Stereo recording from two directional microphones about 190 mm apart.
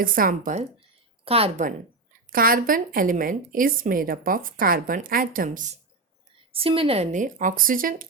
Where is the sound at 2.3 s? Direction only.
50° right (ahead or behind).